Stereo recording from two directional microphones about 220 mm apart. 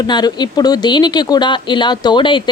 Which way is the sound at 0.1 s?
20° left (ahead or behind).